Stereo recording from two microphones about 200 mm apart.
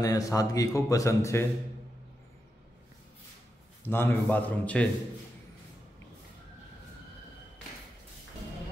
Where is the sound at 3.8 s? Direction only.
10° left (ahead or behind).